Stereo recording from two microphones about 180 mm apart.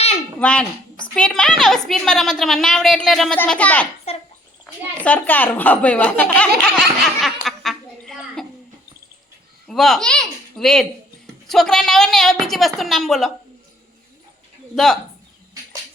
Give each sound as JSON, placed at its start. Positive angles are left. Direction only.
{"t": 0.3, "sound": "a child's voice", "side_deg": 5}
{"t": 4.1, "sound": "bathtub", "side_deg": 35}
{"t": 4.6, "sound": "a child's voice", "side_deg": 10}
{"t": 6.6, "sound": "giggle", "side_deg": 0}
{"t": 9.6, "sound": "a woman's voice", "side_deg": 0}